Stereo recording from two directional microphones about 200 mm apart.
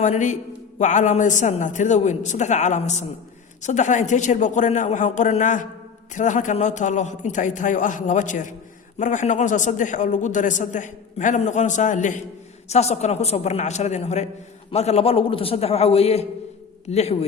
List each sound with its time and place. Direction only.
0.0 s a man's voice: 35° left (ahead or behind)